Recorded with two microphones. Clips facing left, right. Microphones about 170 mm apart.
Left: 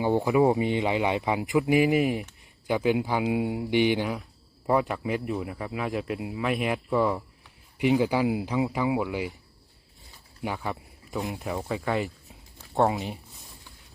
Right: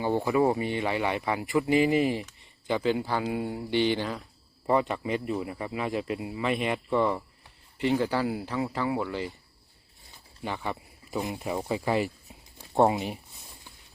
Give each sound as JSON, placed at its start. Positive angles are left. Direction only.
{"t": 0.0, "sound": "speech", "side_deg": 15}
{"t": 4.6, "sound": "speech", "side_deg": 0}
{"t": 10.4, "sound": "speech", "side_deg": 0}
{"t": 12.5, "sound": "a sound", "side_deg": -15}